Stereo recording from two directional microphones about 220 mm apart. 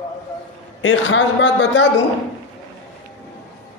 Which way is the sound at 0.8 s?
60° left (ahead or behind).